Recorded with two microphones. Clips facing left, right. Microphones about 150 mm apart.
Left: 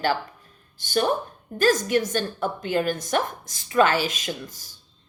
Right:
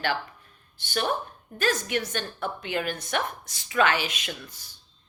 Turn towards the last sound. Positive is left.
turn(degrees=45)  # may be behind; listen again after turning